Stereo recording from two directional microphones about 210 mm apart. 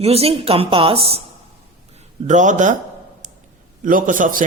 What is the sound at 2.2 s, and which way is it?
Speech, 35° right (ahead or behind).